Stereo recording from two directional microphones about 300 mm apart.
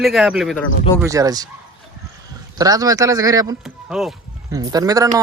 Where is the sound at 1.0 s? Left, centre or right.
Centre.